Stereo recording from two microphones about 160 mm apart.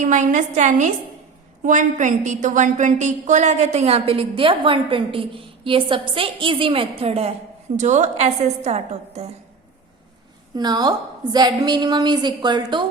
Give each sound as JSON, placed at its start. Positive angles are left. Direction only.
{"t": 0.0, "sound": "a woman's voice", "side_deg": -50}
{"t": 10.5, "sound": "a woman's voice", "side_deg": -25}